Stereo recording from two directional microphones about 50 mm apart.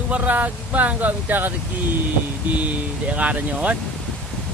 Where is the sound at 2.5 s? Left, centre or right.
Right.